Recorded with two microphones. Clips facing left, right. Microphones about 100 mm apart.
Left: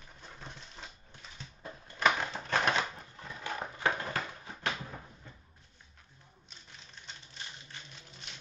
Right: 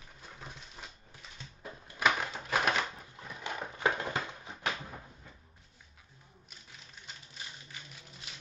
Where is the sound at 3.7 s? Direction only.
20° right (ahead or behind).